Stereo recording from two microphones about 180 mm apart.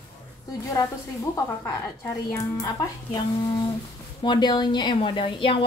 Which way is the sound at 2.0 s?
20° left (ahead or behind).